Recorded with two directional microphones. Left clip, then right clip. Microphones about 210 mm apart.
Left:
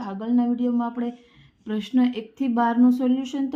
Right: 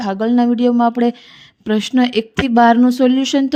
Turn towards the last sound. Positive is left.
turn(degrees=-35)  # may be behind; listen again after turning